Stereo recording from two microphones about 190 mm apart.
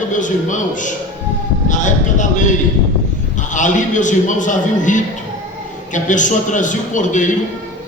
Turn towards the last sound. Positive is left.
turn(degrees=40)  # may be behind; listen again after turning